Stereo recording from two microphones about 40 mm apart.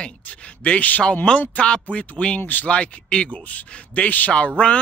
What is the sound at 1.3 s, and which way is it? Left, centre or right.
Speech, left.